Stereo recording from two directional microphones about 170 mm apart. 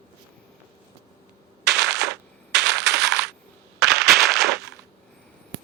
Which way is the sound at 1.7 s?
Centre (ahead or behind).